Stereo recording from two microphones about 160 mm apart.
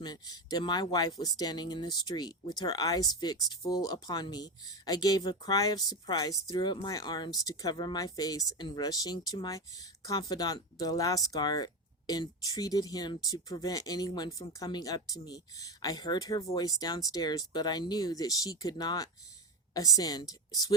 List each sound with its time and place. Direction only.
0.0 s speech: 25° left (ahead or behind)